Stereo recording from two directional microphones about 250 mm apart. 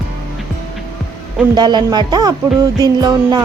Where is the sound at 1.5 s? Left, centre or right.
Centre.